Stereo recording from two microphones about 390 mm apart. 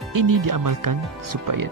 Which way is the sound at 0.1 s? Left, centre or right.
Right.